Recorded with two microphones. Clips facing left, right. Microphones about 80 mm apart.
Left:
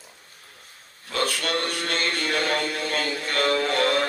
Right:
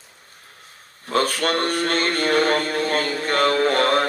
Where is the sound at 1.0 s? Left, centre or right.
Right.